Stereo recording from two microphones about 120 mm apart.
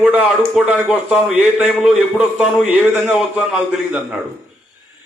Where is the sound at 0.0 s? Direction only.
15° right (ahead or behind).